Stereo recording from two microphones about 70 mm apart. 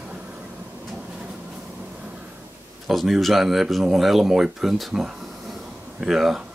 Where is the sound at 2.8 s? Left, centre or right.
Centre.